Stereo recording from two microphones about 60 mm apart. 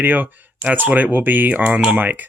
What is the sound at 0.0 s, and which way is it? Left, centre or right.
Speech, right.